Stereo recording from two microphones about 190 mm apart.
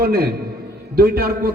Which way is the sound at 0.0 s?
55° right (ahead or behind).